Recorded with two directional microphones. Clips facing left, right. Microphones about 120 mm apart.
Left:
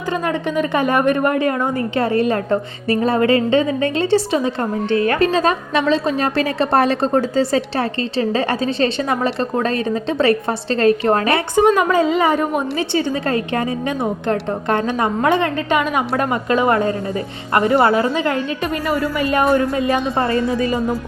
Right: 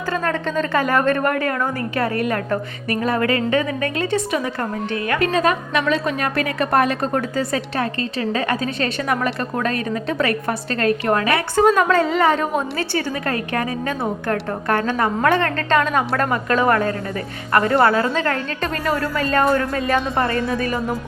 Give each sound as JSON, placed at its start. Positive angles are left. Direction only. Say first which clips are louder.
{"t": 0.1, "sound": "a woman's voice", "louder": "left 2 dB", "side_deg": 15}
{"t": 11.5, "sound": "a woman's voice", "louder": "left 1 dB", "side_deg": 15}
{"t": 18.1, "sound": "a woman's voice", "louder": "left 2 dB", "side_deg": 15}
{"t": 19.1, "sound": "a woman's voice", "louder": "left 2 dB", "side_deg": 15}